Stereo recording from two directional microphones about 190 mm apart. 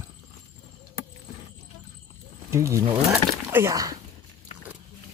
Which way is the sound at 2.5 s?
15° right (ahead or behind).